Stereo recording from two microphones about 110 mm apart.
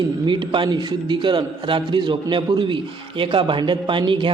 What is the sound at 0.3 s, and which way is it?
A man's voice, 45° right (ahead or behind).